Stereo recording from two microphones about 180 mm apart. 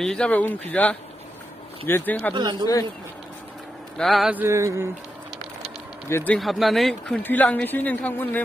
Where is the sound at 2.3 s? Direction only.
25° right (ahead or behind).